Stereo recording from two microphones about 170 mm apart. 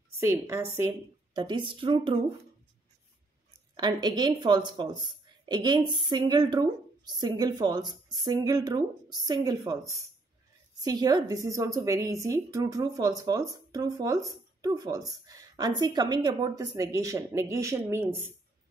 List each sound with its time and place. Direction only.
0.2 s a woman's voice: 15° right (ahead or behind)
1.3 s a woman's voice: 25° right (ahead or behind)
3.7 s a woman's voice: 25° right (ahead or behind)